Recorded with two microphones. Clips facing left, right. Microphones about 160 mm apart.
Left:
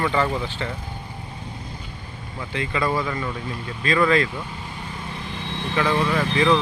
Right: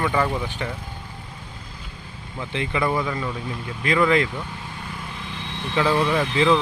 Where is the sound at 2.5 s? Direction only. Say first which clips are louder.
Even; 20° right (ahead or behind).